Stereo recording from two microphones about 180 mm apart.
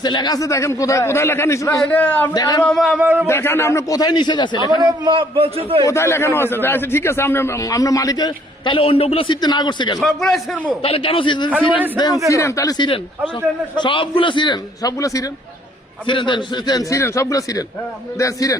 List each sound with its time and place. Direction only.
0.0 s a man's voice: 25° left (ahead or behind)
2.3 s a man's voice: 20° left (ahead or behind)
2.6 s a man's voice: centre (ahead or behind)
3.2 s a man's voice: 15° left (ahead or behind)
4.8 s a man's voice: 25° right (ahead or behind)
5.8 s a man's voice: 15° left (ahead or behind)
10.0 s a man's voice: centre (ahead or behind)
10.8 s a man's voice: 30° left (ahead or behind)